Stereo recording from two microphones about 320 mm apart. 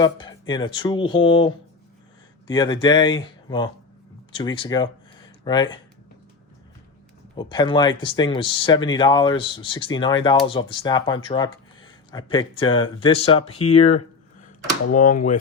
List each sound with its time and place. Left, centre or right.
0.0 s speech: centre
7.5 s speech: centre